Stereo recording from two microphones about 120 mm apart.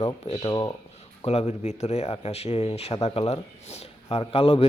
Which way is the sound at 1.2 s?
60° left (ahead or behind).